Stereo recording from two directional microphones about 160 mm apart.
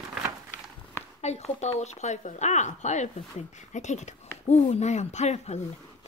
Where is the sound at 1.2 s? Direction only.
40° left (ahead or behind).